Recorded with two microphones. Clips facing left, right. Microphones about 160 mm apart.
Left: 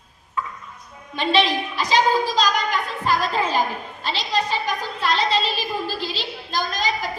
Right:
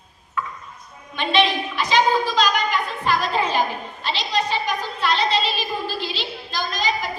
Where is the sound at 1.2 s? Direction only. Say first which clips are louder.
Even; 35° left (ahead or behind).